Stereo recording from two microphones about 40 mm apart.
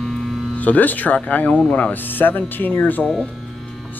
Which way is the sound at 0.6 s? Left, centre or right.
Left.